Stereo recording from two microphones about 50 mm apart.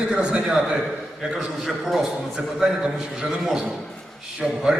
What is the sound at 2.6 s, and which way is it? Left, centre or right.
Speech, right.